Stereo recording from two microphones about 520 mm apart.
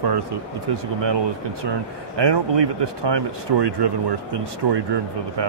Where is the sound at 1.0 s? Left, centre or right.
Right.